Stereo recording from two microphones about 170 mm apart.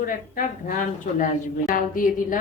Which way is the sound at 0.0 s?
55° left (ahead or behind).